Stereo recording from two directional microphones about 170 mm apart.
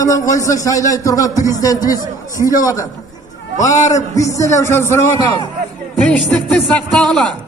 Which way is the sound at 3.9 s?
20° left (ahead or behind).